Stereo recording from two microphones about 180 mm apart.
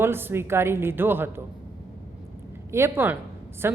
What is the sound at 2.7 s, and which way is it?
Speech, 15° right (ahead or behind).